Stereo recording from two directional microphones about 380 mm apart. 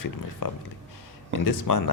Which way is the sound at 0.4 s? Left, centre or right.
Left.